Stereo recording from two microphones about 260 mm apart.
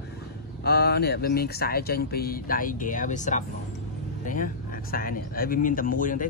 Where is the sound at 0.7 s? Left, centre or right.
Left.